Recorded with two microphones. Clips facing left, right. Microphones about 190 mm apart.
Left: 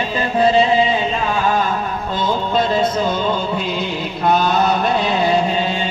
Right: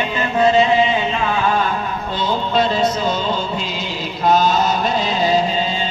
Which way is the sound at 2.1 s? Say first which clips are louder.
Even; 50° left (ahead or behind).